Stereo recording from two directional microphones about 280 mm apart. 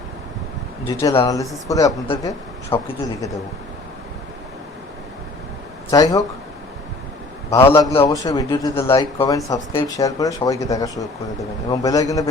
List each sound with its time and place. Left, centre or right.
0.9 s speech: centre
5.9 s speech: centre
7.5 s speech: centre